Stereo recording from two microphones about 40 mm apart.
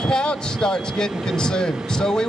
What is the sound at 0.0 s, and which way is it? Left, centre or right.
Speech, left.